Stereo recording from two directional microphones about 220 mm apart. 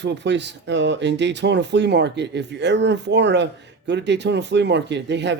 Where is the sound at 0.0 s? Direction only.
50° right (ahead or behind).